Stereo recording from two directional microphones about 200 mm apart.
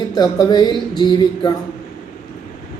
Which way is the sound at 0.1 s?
20° left (ahead or behind).